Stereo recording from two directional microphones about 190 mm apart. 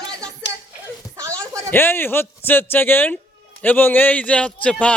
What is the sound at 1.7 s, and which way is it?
A man's voice, 10° left (ahead or behind).